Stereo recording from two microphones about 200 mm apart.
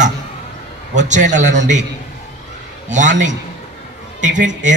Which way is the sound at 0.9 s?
35° right (ahead or behind).